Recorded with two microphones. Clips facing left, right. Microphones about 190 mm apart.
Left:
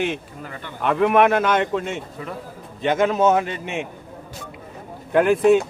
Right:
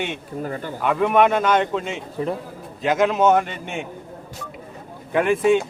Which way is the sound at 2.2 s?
35° right (ahead or behind).